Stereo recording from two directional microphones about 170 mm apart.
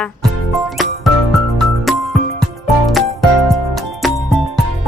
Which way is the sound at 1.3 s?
Centre (ahead or behind).